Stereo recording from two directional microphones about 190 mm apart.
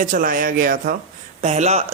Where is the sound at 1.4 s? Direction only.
35° right (ahead or behind).